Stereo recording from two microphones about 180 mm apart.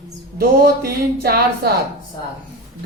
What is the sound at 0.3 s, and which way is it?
A woman's voice, 55° right (ahead or behind).